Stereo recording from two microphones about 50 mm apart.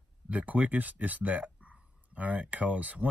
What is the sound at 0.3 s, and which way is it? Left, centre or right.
Speech, right.